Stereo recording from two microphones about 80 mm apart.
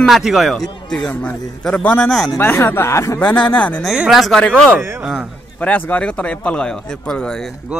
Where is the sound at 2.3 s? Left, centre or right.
Left.